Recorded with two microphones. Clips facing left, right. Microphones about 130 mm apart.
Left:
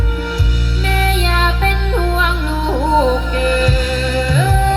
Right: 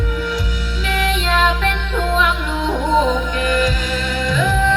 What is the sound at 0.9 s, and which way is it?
Music, 35° left (ahead or behind).